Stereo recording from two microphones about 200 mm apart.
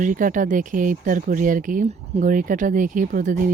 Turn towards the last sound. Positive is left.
turn(degrees=-40)  # may be behind; listen again after turning